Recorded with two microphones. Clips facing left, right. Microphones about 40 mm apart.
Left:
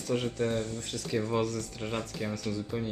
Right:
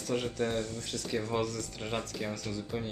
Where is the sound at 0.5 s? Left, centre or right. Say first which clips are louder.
Left 2 dB; left.